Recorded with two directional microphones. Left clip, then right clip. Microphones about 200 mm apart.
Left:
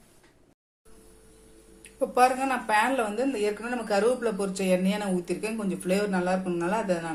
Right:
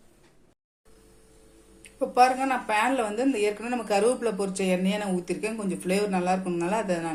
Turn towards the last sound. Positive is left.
turn(degrees=-20)  # may be behind; listen again after turning